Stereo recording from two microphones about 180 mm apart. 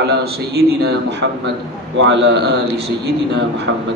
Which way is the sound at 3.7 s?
90° right.